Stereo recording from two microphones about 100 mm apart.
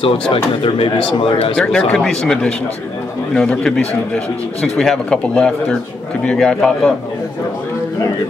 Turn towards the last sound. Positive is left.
turn(degrees=5)  # may be behind; listen again after turning